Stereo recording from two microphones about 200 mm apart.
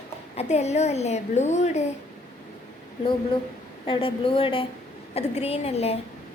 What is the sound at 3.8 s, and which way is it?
A woman's voice, 25° left (ahead or behind).